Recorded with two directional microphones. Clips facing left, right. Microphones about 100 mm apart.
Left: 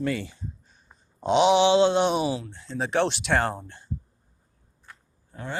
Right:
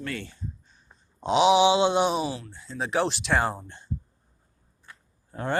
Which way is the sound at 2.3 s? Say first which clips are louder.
Left 5 dB; 20° left (ahead or behind).